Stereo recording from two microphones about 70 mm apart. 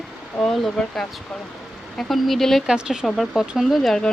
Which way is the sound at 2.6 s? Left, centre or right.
Centre.